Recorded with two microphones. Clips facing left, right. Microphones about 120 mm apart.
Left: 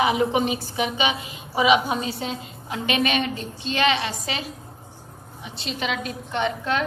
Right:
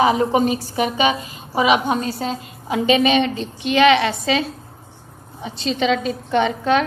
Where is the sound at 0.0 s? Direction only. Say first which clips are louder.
Right 4 dB; 35° right (ahead or behind).